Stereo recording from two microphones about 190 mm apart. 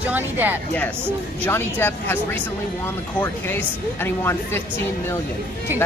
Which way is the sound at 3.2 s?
10° left (ahead or behind).